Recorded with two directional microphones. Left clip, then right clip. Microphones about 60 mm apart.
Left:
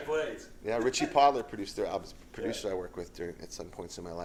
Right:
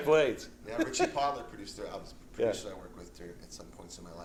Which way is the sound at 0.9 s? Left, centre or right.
Left.